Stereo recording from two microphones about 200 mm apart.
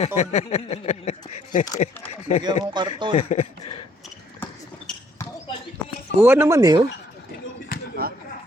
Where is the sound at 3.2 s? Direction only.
30° left (ahead or behind).